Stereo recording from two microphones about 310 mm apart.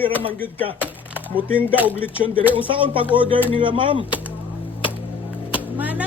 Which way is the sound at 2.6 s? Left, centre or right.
Centre.